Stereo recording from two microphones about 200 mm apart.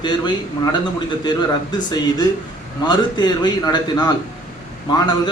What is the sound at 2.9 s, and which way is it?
A man's voice, 20° left (ahead or behind).